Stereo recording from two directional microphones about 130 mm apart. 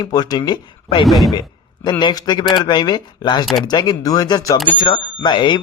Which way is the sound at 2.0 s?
35° left (ahead or behind).